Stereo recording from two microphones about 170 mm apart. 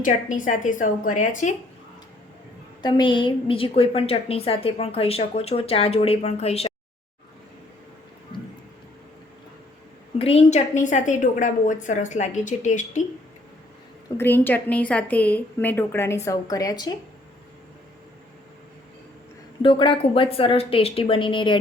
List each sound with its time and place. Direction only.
0.0 s a woman's voice: 50° left (ahead or behind)
2.8 s a woman's voice: 30° left (ahead or behind)
10.2 s a woman's voice: 35° left (ahead or behind)
14.2 s a woman's voice: 10° left (ahead or behind)
19.6 s a woman's voice: 30° left (ahead or behind)